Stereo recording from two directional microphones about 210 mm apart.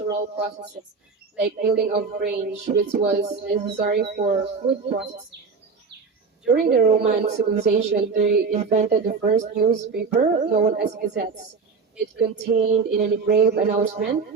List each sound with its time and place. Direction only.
0.1 s speech: 55° right (ahead or behind)
1.4 s speech: 40° right (ahead or behind)
4.1 s speech: 35° right (ahead or behind)
6.5 s speech: 50° right (ahead or behind)
7.2 s speech: 35° right (ahead or behind)
12.6 s speech: 45° right (ahead or behind)